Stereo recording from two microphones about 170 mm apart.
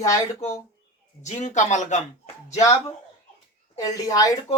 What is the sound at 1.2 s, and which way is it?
Speech, 45° left (ahead or behind).